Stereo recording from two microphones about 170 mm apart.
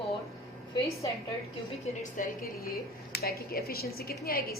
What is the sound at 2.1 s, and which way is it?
A woman's voice, 55° left (ahead or behind).